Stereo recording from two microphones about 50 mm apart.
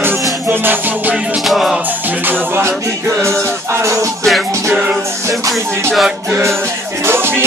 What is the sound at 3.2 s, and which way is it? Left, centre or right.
Music, right.